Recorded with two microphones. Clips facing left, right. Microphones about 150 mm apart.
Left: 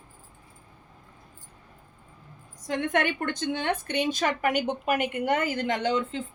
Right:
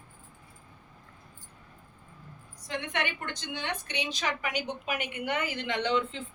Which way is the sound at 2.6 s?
45° left (ahead or behind).